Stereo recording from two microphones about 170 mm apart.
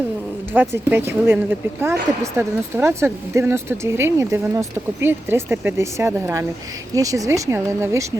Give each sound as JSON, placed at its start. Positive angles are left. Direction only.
{"t": 0.5, "sound": "a woman's voice", "side_deg": -10}